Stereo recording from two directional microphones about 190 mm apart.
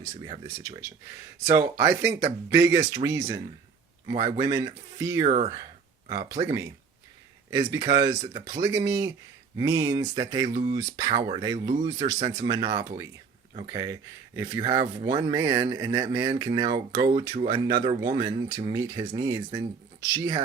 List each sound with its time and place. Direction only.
0.2 s speech: 20° right (ahead or behind)
5.2 s speech: 35° right (ahead or behind)
6.1 s speech: 20° right (ahead or behind)
10.5 s speech: 50° right (ahead or behind)
10.8 s speech: 20° right (ahead or behind)